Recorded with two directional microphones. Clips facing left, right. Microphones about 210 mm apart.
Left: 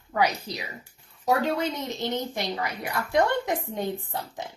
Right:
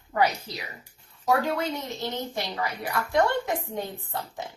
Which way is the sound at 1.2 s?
20° left (ahead or behind).